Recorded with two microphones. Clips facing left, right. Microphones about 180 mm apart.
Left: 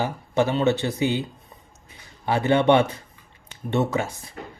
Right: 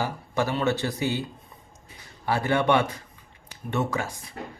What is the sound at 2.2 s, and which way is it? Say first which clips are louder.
Speech: left 4 dB; 20° left (ahead or behind).